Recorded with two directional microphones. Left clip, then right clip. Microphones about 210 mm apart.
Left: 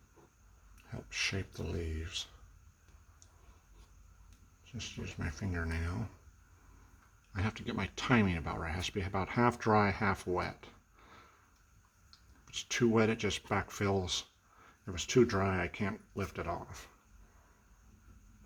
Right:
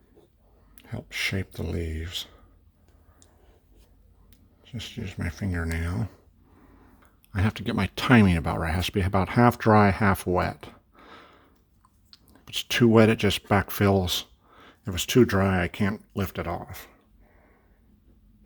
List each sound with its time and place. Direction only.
0.8 s speech: 35° right (ahead or behind)
4.6 s speech: 35° right (ahead or behind)
7.3 s speech: 40° right (ahead or behind)